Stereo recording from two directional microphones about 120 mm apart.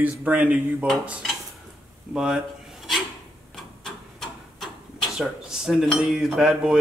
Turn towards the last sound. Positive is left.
turn(degrees=-5)  # may be behind; listen again after turning